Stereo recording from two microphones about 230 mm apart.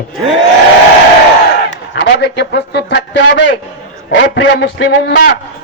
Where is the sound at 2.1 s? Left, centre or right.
Left.